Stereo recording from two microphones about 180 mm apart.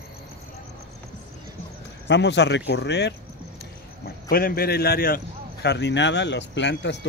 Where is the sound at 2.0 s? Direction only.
75° left (ahead or behind).